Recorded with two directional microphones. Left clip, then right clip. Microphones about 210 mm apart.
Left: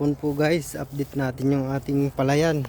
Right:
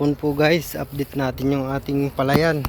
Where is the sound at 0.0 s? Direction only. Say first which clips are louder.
Right 4 dB; 10° left (ahead or behind); by 2.6 s 25° left (ahead or behind).